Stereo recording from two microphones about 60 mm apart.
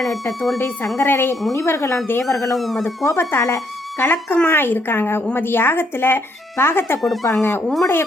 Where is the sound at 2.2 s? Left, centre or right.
Left.